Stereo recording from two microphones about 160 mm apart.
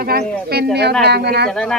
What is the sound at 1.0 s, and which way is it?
Speech, 90° right.